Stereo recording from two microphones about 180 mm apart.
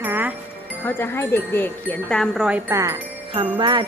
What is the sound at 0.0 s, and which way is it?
Music, 10° right (ahead or behind).